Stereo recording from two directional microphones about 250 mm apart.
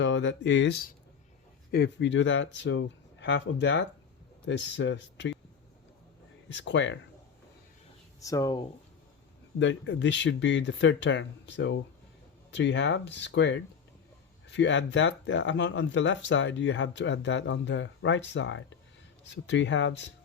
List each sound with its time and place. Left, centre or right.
0.0 s speech: left
6.5 s speech: left
8.2 s speech: centre
9.6 s speech: left